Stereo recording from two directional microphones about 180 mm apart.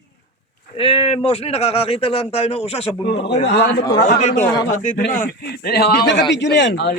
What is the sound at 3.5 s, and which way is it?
Speech, 70° left (ahead or behind).